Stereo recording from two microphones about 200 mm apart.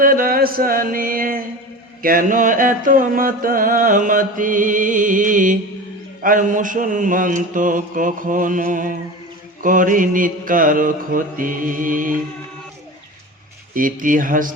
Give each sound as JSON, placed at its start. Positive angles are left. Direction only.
{"t": 0.0, "sound": "a sound", "side_deg": -45}
{"t": 2.0, "sound": "mantra", "side_deg": -45}
{"t": 13.7, "sound": "mantra", "side_deg": -40}